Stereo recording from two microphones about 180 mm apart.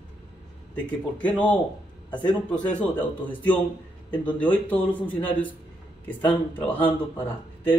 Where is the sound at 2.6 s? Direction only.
10° left (ahead or behind).